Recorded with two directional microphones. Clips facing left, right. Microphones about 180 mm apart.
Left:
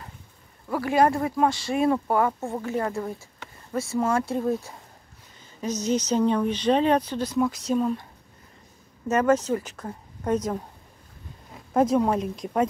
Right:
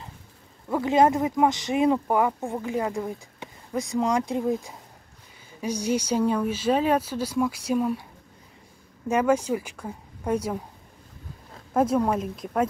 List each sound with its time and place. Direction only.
0.7 s speech: 20° right (ahead or behind)
11.7 s speech: 5° right (ahead or behind)